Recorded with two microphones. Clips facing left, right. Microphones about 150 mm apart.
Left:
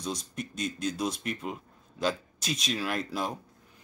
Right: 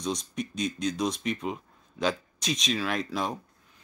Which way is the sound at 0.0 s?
5° left (ahead or behind).